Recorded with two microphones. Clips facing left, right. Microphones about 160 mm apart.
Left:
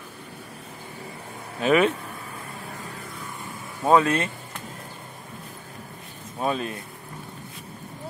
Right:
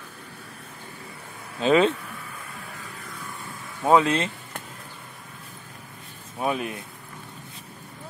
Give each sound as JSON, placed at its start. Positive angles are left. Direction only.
{"t": 1.6, "sound": "speech", "side_deg": -25}
{"t": 3.9, "sound": "speech", "side_deg": -20}
{"t": 6.4, "sound": "speech", "side_deg": -15}